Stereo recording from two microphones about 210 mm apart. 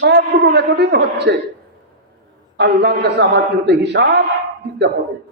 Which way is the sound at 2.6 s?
50° right (ahead or behind).